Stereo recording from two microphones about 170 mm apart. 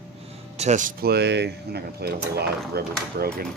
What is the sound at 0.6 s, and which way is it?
Speech, 45° right (ahead or behind).